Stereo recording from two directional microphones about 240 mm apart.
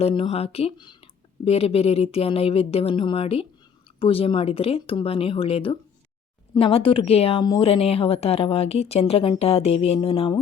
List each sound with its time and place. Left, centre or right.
0.0 s speech: left